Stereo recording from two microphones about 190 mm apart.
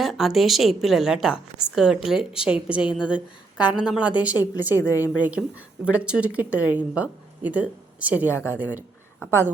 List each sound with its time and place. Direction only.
0.0 s a woman's voice: centre (ahead or behind)
4.7 s a woman's voice: 15° left (ahead or behind)
5.2 s speech: 5° right (ahead or behind)